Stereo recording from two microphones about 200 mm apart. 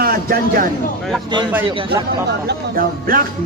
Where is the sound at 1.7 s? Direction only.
25° right (ahead or behind).